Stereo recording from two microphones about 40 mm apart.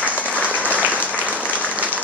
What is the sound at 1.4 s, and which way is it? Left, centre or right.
Applause, left.